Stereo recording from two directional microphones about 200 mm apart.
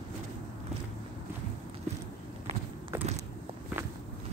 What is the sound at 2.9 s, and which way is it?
Walk, 10° right (ahead or behind).